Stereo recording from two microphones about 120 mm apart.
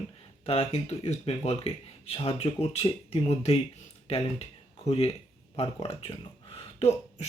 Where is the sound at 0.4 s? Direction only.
55° left (ahead or behind).